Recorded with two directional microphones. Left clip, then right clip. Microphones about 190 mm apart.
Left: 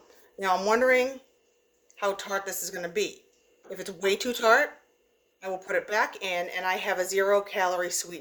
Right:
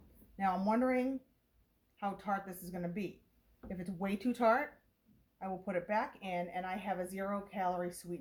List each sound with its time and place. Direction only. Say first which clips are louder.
0.3 s speech: left 9 dB; 40° left (ahead or behind)